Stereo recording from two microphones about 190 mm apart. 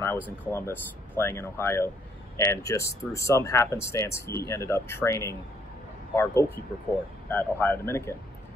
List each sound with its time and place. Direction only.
0.5 s speech: 15° left (ahead or behind)